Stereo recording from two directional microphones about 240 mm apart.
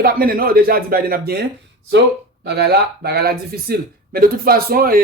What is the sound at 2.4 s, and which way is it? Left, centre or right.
A man's voice, right.